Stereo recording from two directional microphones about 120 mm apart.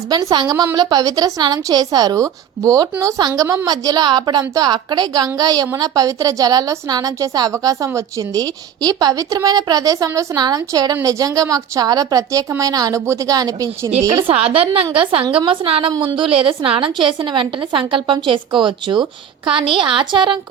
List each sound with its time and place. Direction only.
0.1 s a woman's voice: 30° right (ahead or behind)
14.2 s a woman's voice: 55° right (ahead or behind)